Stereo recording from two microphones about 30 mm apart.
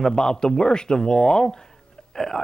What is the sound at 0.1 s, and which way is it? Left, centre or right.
Speech, left.